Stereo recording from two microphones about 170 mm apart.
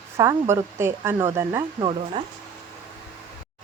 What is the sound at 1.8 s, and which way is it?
Speech, 30° right (ahead or behind).